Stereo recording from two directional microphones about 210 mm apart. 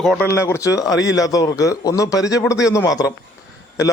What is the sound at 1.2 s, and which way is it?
A man's voice, 15° left (ahead or behind).